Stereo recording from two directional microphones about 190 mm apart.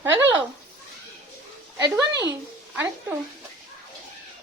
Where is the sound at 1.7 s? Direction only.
20° right (ahead or behind).